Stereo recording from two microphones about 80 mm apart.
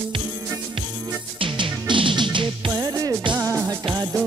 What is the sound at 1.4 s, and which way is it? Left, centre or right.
Music, right.